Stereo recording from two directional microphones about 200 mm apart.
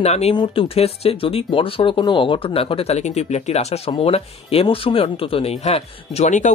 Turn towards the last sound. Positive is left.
turn(degrees=35)  # may be behind; listen again after turning